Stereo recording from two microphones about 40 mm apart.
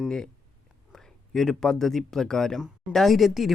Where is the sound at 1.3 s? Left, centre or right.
Centre.